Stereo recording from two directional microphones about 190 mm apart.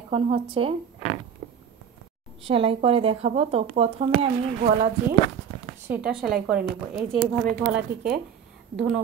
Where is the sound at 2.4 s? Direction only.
30° right (ahead or behind).